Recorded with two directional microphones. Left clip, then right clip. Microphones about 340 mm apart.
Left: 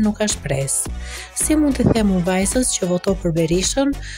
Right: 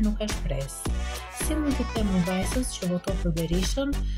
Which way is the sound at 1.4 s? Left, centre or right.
Centre.